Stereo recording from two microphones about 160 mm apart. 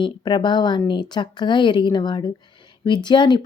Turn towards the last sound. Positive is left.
turn(degrees=30)  # may be behind; listen again after turning